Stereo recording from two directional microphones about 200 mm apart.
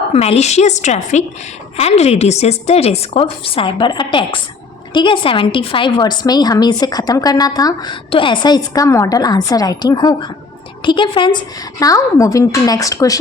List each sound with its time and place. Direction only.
0.1 s a woman's voice: 30° left (ahead or behind)